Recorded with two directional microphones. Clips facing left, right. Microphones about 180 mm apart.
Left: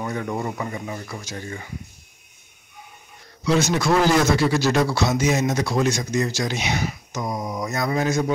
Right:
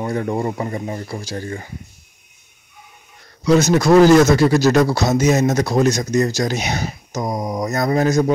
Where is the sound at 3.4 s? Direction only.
40° right (ahead or behind).